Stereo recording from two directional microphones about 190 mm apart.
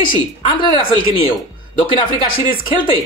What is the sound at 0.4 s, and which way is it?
Speech, 30° left (ahead or behind).